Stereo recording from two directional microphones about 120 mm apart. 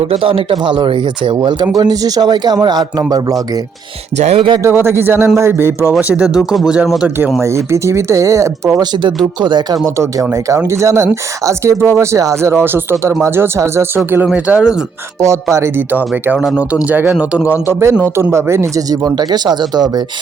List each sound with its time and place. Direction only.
0.1 s speech: 50° right (ahead or behind); by 3.3 s 30° right (ahead or behind)
4.2 s music: 60° right (ahead or behind)
4.6 s speech: 20° right (ahead or behind); by 7.1 s 5° right (ahead or behind)
7.4 s speech: 25° right (ahead or behind)
9.4 s a man's voice: 40° right (ahead or behind); by 14.6 s 15° right (ahead or behind)
15.2 s a man's voice: 25° right (ahead or behind)